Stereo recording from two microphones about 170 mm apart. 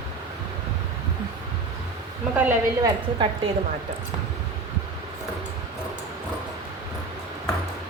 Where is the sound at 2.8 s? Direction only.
30° right (ahead or behind).